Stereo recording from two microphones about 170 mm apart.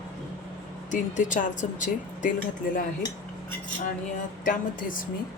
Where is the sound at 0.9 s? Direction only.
45° left (ahead or behind).